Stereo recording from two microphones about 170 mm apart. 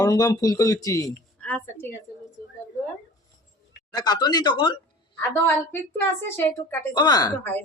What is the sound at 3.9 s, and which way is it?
Speech, 25° left (ahead or behind).